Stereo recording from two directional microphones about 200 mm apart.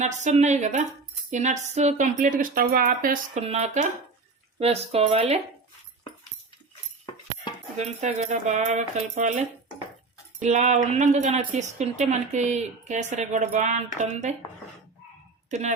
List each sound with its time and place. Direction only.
0.0 s speech: 35° right (ahead or behind)
3.4 s speech: 30° right (ahead or behind)
7.8 s speech: 35° right (ahead or behind)
15.4 s speech: 35° right (ahead or behind)